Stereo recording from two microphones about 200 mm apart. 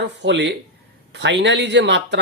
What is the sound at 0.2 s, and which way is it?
Speech, 60° right (ahead or behind).